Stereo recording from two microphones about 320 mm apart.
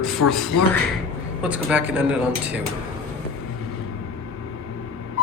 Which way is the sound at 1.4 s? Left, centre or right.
Centre.